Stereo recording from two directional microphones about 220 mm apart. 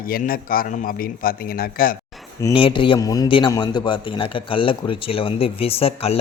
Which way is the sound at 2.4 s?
25° left (ahead or behind).